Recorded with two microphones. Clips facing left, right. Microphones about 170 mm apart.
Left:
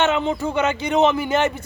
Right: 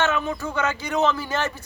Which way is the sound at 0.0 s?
25° left (ahead or behind).